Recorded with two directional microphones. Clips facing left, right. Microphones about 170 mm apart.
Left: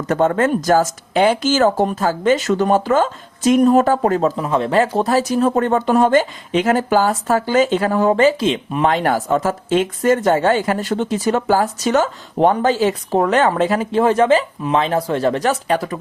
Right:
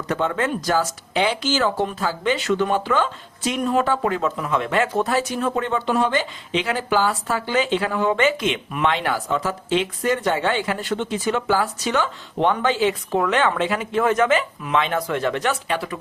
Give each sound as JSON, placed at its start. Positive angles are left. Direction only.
{"t": 0.1, "sound": "speech", "side_deg": 45}